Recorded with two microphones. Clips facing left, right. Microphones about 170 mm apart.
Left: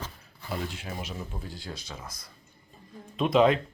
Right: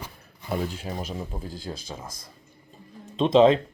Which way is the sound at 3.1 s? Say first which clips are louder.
Right 5 dB; 25° right (ahead or behind).